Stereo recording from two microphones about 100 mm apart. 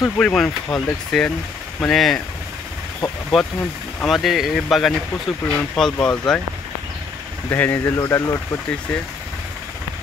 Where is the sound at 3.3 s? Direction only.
Centre (ahead or behind).